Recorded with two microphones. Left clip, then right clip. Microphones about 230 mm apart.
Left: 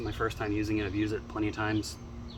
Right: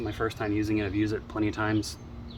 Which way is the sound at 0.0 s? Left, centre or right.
Right.